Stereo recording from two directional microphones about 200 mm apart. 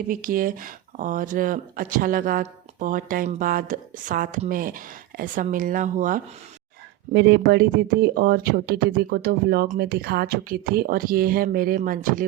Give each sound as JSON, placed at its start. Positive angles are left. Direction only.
{"t": 0.1, "sound": "speech", "side_deg": -45}
{"t": 7.1, "sound": "speech", "side_deg": -60}